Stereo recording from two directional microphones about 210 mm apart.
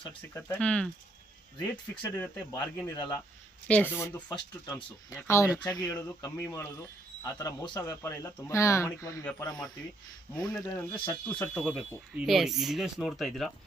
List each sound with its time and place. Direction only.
0.3 s speech: 10° left (ahead or behind)
3.7 s speech: 10° left (ahead or behind)
11.6 s speech: 5° right (ahead or behind)